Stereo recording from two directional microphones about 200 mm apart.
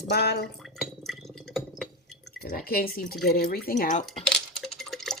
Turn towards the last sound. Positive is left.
turn(degrees=0)  # may be behind; listen again after turning